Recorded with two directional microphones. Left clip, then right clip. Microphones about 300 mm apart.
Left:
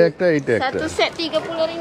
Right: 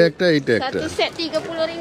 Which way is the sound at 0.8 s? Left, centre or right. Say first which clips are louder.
Left 2 dB; centre.